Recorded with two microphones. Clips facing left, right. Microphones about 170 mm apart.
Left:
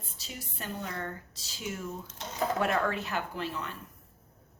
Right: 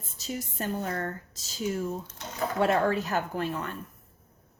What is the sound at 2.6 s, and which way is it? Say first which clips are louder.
Speech: right 8 dB; 30° right (ahead or behind).